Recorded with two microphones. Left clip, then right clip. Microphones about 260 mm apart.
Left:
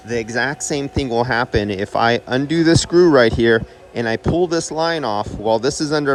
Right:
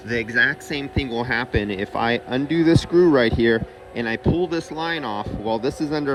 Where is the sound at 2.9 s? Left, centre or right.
Right.